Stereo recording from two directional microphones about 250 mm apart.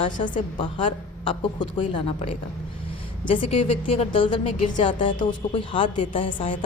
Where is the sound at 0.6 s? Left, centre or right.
Left.